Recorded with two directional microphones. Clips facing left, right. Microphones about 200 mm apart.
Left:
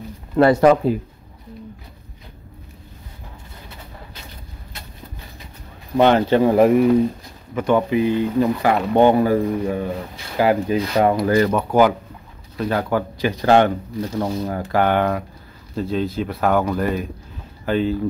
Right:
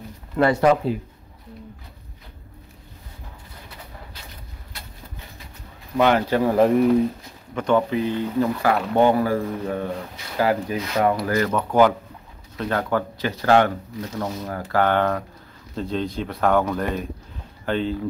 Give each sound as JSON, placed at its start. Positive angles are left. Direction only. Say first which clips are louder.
{"t": 0.4, "sound": "speech", "louder": "left 4 dB", "side_deg": 40}
{"t": 5.9, "sound": "speech", "louder": "left 4 dB", "side_deg": 25}
{"t": 6.7, "sound": "speech", "louder": "left 3 dB", "side_deg": 5}
{"t": 10.3, "sound": "speech", "louder": "left 4 dB", "side_deg": 20}
{"t": 10.8, "sound": "speech", "louder": "left 4 dB", "side_deg": 30}
{"t": 11.5, "sound": "speech", "louder": "left 2 dB", "side_deg": 10}